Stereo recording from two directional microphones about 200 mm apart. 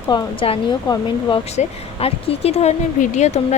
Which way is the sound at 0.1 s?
25° left (ahead or behind).